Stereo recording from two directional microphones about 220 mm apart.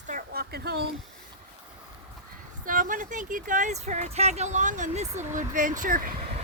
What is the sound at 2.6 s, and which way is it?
Speech, 40° right (ahead or behind).